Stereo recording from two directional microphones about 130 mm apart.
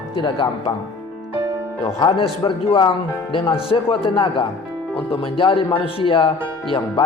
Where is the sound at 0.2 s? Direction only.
40° left (ahead or behind).